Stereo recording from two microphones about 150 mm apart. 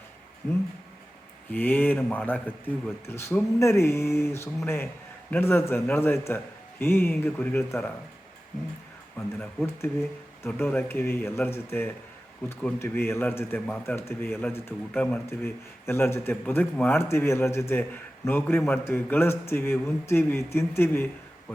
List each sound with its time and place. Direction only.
1.5 s speech: 10° left (ahead or behind)
9.1 s speech: 10° left (ahead or behind)